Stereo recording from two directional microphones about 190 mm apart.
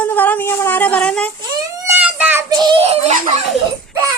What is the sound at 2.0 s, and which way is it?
Child singing, 5° right (ahead or behind).